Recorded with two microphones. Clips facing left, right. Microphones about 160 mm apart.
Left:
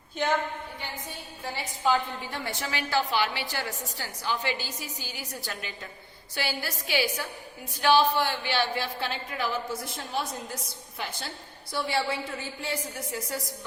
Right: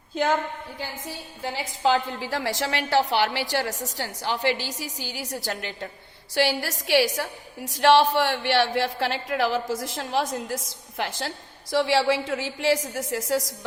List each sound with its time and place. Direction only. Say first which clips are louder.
1.5 s a woman's voice: right 3 dB; 90° right